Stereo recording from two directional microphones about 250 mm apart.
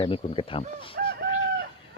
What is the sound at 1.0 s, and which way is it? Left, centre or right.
Chicken, right.